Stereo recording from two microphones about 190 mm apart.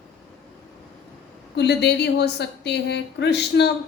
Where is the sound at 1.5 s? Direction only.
60° left (ahead or behind).